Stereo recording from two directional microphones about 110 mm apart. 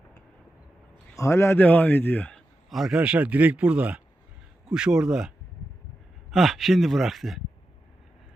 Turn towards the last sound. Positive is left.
turn(degrees=0)  # may be behind; listen again after turning